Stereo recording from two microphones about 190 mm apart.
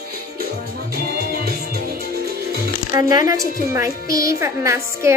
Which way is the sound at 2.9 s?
20° right (ahead or behind).